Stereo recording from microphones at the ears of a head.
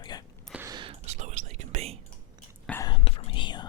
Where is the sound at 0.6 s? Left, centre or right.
Right.